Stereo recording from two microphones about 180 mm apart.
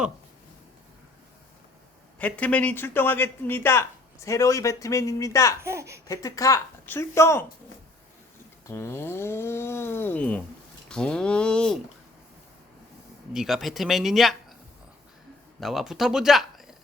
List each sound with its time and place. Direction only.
2.1 s a man's voice: 10° left (ahead or behind)
5.6 s speech: 15° right (ahead or behind)
6.1 s a man's voice: 20° left (ahead or behind)
8.6 s a man's voice: 15° left (ahead or behind)
13.3 s speech: centre (ahead or behind)
15.6 s speech: centre (ahead or behind)